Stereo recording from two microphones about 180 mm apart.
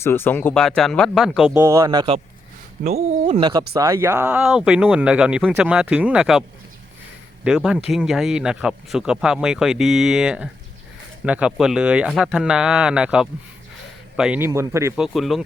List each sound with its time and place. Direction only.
0.0 s speech: 15° left (ahead or behind); by 2.2 s 25° right (ahead or behind)
2.8 s speech: 35° right (ahead or behind)
3.8 s speech: 15° right (ahead or behind)
7.4 s speech: 5° right (ahead or behind)
14.9 s speech: centre (ahead or behind)